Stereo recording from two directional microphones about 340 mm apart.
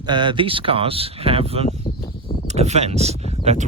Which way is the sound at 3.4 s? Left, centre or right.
Centre.